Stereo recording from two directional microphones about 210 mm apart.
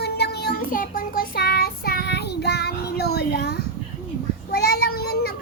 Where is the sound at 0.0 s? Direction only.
50° left (ahead or behind).